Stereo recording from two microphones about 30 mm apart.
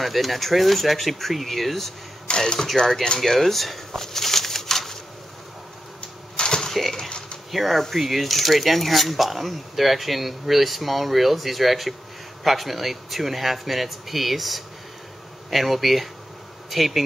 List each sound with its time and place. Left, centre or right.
0.0 s speech: centre
2.2 s speech: left
3.2 s speech: centre
6.3 s typewriter: left
6.7 s a sound: centre
7.1 s a sound: left
7.5 s speech: centre